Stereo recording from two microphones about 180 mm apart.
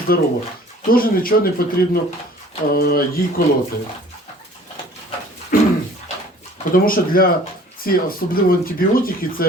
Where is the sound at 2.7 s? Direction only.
60° left (ahead or behind).